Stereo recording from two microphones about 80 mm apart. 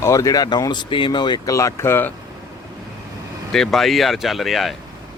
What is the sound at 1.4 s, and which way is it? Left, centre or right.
Speech, left.